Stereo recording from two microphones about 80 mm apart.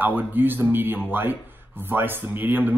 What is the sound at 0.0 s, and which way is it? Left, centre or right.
Speech, right.